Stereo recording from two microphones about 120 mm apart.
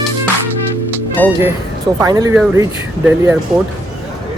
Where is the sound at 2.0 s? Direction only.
30° right (ahead or behind).